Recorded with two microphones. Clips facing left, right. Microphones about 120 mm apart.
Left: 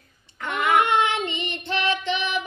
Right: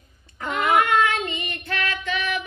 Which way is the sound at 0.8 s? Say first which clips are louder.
Right 1 dB; 25° left (ahead or behind).